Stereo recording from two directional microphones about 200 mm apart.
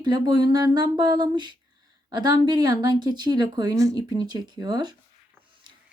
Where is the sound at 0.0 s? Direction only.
20° right (ahead or behind).